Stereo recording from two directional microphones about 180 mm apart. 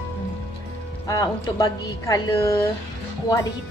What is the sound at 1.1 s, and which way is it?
A woman's voice, 20° left (ahead or behind).